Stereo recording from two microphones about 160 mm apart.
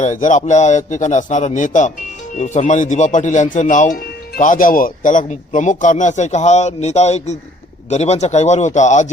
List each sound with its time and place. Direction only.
0.0 s speech: 50° left (ahead or behind)